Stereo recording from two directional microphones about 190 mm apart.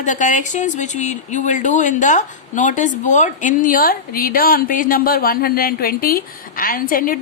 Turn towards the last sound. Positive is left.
turn(degrees=50)  # may be behind; listen again after turning